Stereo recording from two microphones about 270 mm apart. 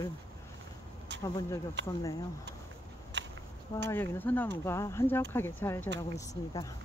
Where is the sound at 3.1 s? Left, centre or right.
Right.